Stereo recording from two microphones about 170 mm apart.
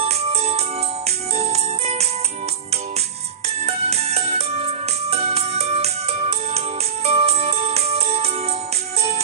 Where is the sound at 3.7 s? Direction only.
40° right (ahead or behind).